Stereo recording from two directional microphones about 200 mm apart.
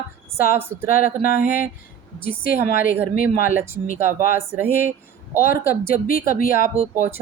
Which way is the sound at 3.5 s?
10° right (ahead or behind).